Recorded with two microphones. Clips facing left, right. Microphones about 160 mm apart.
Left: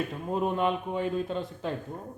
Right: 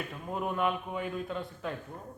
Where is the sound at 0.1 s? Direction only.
25° left (ahead or behind).